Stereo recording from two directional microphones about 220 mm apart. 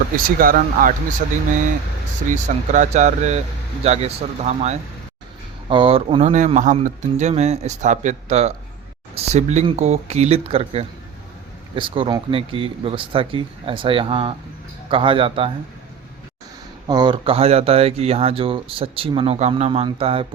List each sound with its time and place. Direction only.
0.2 s speech: 40° right (ahead or behind)
2.3 s speech: 35° right (ahead or behind)
16.8 s speech: 20° right (ahead or behind)